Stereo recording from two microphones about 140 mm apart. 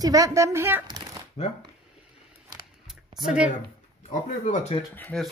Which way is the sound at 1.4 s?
45° left (ahead or behind).